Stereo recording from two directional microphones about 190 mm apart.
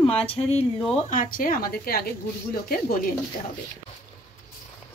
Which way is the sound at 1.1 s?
45° left (ahead or behind).